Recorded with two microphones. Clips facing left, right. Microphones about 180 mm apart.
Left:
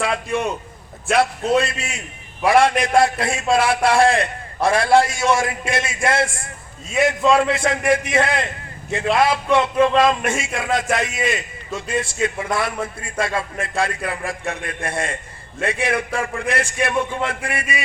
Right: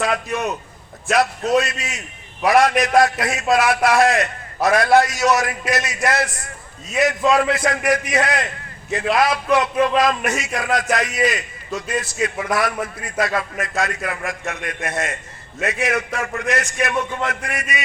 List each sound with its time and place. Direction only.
1.1 s a man's voice: 30° left (ahead or behind)